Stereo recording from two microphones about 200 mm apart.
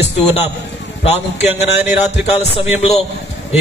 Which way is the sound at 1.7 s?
10° right (ahead or behind).